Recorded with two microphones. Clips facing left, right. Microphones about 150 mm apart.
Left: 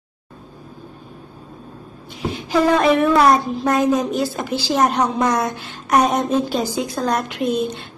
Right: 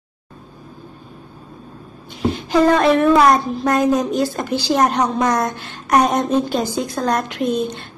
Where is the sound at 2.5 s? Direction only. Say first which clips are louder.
Right 1 dB; centre (ahead or behind).